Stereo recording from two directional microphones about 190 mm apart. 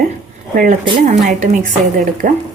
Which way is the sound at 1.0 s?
40° right (ahead or behind).